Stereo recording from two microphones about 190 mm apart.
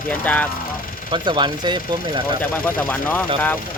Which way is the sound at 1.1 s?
25° right (ahead or behind).